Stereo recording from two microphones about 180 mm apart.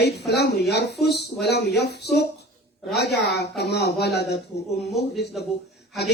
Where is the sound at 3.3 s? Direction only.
65° left (ahead or behind).